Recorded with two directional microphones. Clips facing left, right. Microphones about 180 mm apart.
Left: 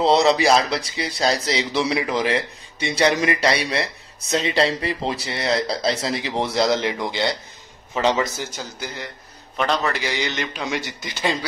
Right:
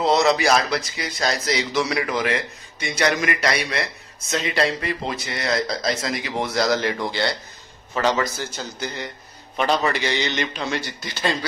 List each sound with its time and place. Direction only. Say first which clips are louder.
0.0 s a man's voice: left 2 dB; 30° left (ahead or behind)
8.5 s a man's voice: right 2 dB; 5° left (ahead or behind)